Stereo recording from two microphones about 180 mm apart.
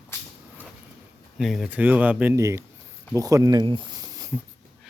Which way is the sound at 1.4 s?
Centre (ahead or behind).